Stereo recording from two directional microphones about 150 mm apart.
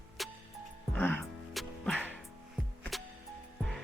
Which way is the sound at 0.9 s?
15° left (ahead or behind).